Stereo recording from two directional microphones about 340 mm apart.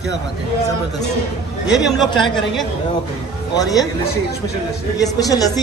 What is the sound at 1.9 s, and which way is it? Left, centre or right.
Speech, centre.